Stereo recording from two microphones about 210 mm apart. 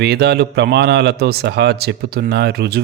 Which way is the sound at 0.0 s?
50° right (ahead or behind).